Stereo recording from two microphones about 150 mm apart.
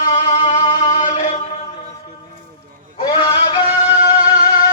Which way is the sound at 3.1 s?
35° left (ahead or behind).